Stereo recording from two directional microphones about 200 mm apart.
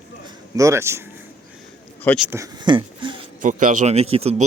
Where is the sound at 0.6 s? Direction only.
15° right (ahead or behind).